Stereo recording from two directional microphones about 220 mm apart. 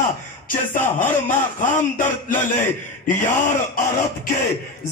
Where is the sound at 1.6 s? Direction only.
35° left (ahead or behind).